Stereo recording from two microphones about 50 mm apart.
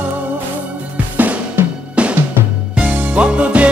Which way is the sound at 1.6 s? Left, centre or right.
Right.